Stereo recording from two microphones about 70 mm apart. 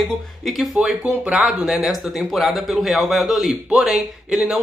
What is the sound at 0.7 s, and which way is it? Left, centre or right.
Speech, centre.